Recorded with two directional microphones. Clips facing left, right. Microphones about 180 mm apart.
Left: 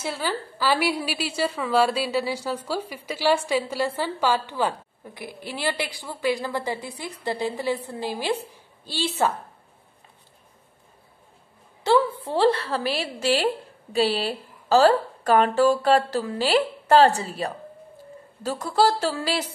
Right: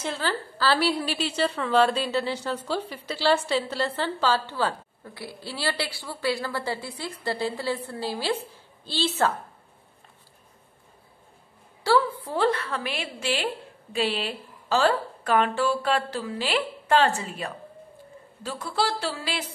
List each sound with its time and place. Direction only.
0.0 s a woman's voice: 10° left (ahead or behind)
11.8 s a woman's voice: 25° left (ahead or behind); by 19.4 s 40° left (ahead or behind)